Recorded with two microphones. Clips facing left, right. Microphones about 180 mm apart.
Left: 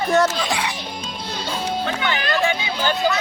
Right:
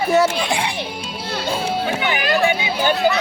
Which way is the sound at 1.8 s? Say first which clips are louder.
Right 3 dB; 15° right (ahead or behind).